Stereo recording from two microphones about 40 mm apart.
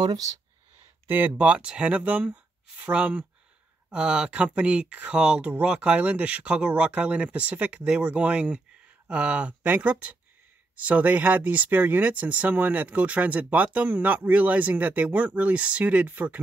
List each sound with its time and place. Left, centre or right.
1.0 s speech: right
1.3 s speech: right
1.9 s speech: right
2.9 s speech: right
5.1 s speech: right
16.1 s speech: right